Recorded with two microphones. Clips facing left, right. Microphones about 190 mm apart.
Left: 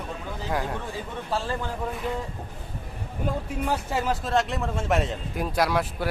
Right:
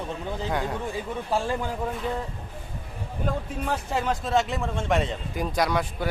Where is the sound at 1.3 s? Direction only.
15° right (ahead or behind).